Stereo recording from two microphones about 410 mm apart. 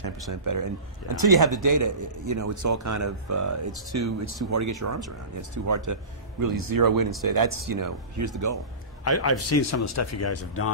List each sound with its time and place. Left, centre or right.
0.3 s a man's voice: right
9.0 s speech: left